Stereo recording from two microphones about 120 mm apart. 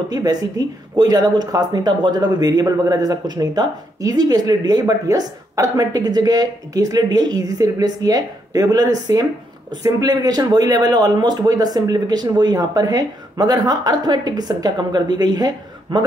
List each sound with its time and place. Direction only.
0.1 s speech: 30° right (ahead or behind)